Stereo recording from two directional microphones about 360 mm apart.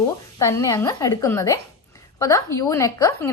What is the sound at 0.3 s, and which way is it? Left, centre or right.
A woman's voice, centre.